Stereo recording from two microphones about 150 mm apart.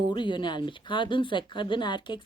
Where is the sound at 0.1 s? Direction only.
30° left (ahead or behind).